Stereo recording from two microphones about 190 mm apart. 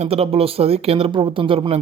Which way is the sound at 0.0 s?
30° right (ahead or behind).